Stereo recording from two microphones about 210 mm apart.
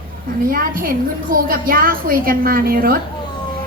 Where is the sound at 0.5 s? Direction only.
45° right (ahead or behind).